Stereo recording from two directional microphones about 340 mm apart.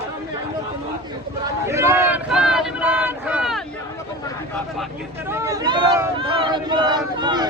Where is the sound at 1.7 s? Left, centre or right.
Centre.